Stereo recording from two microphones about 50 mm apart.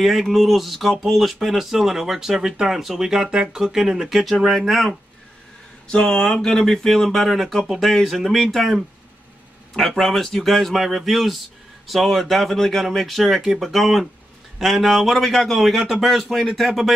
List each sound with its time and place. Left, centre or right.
0.0 s speech: centre
5.9 s a sound: centre
6.2 s speech: centre
9.8 s speech: centre